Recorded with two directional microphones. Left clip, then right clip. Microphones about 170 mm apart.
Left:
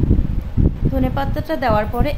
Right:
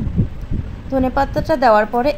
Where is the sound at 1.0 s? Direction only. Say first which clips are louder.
Right 8 dB; 20° right (ahead or behind).